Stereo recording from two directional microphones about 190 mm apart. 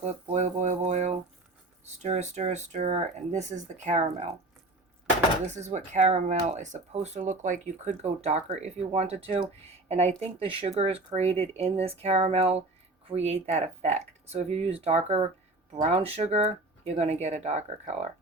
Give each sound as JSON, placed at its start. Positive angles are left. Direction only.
{"t": 0.0, "sound": "a sound", "side_deg": -40}
{"t": 1.8, "sound": "speech", "side_deg": -35}
{"t": 5.5, "sound": "speech", "side_deg": -35}